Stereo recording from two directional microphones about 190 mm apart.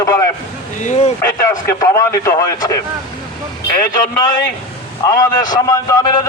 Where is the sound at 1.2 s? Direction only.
15° left (ahead or behind).